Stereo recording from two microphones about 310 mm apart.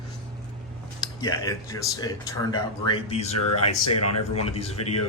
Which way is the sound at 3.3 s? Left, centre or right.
Left.